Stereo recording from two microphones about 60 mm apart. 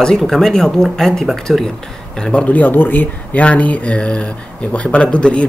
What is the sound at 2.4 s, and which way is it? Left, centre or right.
Speech, left.